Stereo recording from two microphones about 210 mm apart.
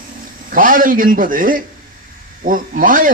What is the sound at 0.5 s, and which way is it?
Speech, 40° right (ahead or behind).